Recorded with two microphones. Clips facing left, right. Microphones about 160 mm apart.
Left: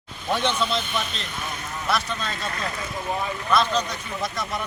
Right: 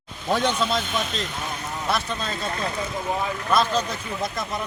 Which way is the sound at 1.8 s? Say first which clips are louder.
Even; 25° right (ahead or behind).